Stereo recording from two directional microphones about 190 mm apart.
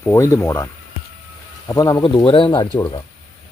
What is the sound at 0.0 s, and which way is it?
Speech, 15° left (ahead or behind).